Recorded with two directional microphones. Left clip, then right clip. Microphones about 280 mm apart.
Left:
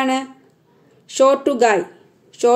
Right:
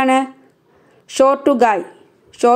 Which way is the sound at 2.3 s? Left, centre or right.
Centre.